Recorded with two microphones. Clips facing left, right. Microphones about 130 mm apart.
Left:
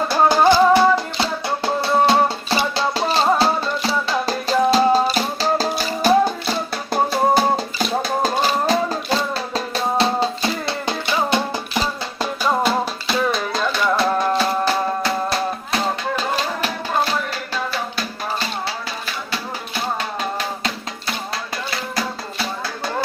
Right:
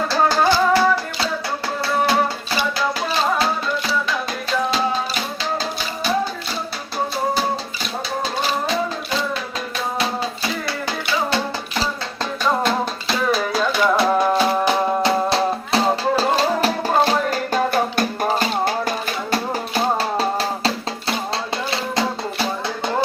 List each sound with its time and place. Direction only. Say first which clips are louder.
0.1 s music: left 4 dB; 15° left (ahead or behind); by 9.4 s 40° left (ahead or behind)
10.7 s music: left 1 dB; 20° left (ahead or behind)
12.2 s music: left 1 dB; 5° left (ahead or behind); by 20.7 s 35° right (ahead or behind)